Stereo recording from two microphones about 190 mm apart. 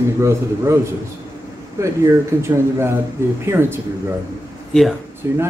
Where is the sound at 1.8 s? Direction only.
15° right (ahead or behind).